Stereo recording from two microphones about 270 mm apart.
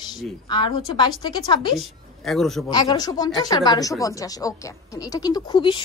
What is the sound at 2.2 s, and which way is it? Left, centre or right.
Speech, centre.